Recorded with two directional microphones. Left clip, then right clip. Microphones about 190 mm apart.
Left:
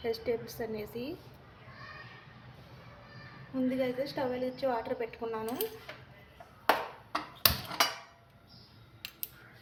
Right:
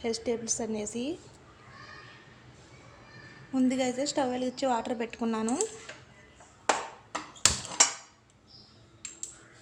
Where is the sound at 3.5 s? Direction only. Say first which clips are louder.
Right 3 dB; 50° right (ahead or behind).